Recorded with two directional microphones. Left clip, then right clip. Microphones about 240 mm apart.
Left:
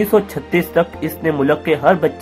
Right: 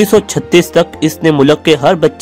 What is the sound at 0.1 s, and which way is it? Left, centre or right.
Speech, right.